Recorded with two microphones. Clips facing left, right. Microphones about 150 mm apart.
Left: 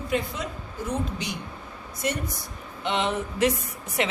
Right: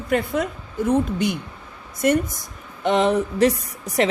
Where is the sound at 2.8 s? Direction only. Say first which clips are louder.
Right 8 dB; 40° right (ahead or behind).